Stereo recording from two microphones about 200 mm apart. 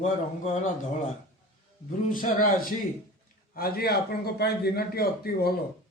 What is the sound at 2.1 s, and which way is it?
A man's voice, 45° left (ahead or behind).